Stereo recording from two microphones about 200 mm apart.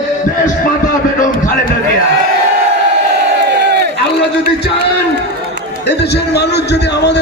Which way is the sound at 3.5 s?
55° right (ahead or behind).